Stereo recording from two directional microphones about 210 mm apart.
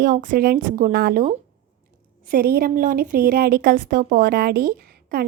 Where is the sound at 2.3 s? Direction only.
45° right (ahead or behind).